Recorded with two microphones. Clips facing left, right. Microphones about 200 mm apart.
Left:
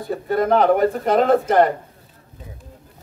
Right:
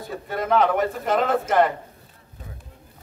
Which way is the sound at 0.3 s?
45° left (ahead or behind).